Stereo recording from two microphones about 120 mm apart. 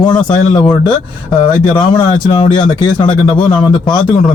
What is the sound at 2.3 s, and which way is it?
A man's voice, 40° left (ahead or behind).